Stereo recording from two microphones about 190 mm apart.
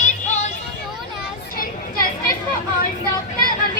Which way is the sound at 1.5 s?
50° left (ahead or behind).